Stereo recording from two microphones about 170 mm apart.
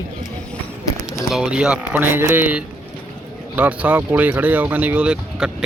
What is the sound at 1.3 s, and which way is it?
Speech, 5° right (ahead or behind).